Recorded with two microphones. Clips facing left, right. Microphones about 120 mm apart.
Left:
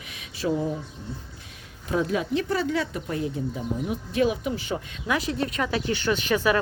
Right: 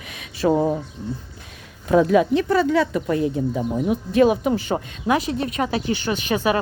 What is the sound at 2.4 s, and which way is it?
Speech, 75° right (ahead or behind).